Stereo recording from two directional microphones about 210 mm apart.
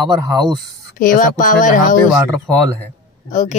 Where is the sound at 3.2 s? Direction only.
35° left (ahead or behind).